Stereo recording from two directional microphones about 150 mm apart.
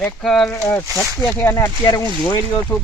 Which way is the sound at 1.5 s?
25° left (ahead or behind).